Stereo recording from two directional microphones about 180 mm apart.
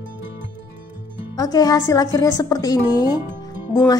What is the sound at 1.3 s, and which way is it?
A woman's voice, 20° left (ahead or behind).